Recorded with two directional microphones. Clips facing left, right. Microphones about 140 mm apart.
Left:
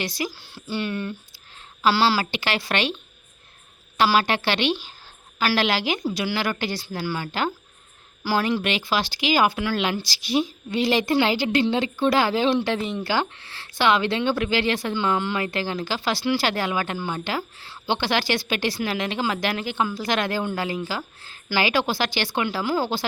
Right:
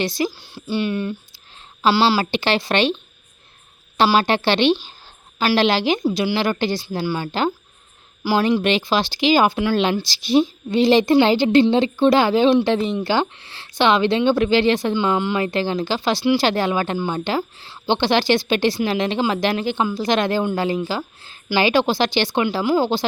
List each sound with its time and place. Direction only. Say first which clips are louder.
0.0 s speech: right 7 dB; 25° right (ahead or behind)
3.9 s speech: right 4 dB; 25° right (ahead or behind)